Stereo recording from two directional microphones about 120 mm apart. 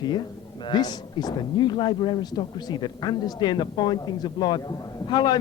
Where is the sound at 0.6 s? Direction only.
35° left (ahead or behind).